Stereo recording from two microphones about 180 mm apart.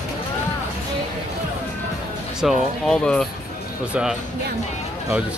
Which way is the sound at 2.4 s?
5° left (ahead or behind).